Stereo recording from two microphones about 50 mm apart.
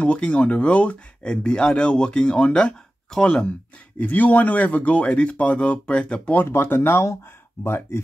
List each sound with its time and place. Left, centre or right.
0.0 s speech: left
6.3 s speech: left